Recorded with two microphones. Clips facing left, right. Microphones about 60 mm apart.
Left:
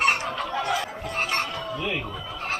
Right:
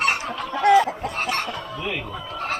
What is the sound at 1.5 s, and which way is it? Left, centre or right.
Chicken, centre.